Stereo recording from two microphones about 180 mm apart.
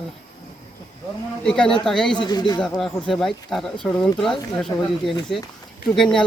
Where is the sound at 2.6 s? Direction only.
Centre (ahead or behind).